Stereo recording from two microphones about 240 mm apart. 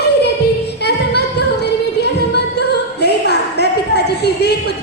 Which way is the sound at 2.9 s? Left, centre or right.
Left.